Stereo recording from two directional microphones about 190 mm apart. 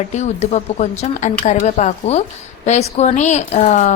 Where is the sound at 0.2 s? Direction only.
35° left (ahead or behind).